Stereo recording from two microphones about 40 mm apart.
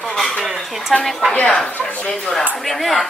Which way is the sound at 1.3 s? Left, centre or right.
Left.